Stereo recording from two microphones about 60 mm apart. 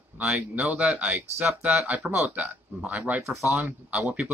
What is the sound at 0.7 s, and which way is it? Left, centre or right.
Speech, centre.